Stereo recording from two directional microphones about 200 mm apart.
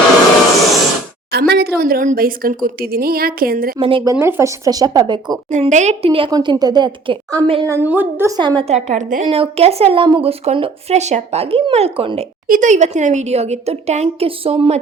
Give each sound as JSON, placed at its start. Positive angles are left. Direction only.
{"t": 1.3, "sound": "a woman's voice", "side_deg": -55}
{"t": 3.8, "sound": "speech", "side_deg": -25}
{"t": 4.2, "sound": "speech", "side_deg": -15}
{"t": 5.5, "sound": "speech", "side_deg": -35}
{"t": 7.7, "sound": "speech", "side_deg": -10}
{"t": 9.2, "sound": "speech", "side_deg": -30}
{"t": 12.5, "sound": "speech", "side_deg": -40}